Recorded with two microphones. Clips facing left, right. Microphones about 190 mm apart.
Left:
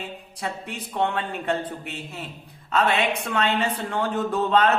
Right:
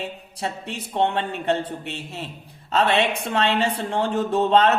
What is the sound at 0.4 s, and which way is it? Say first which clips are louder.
Speech: right 2 dB; 25° right (ahead or behind).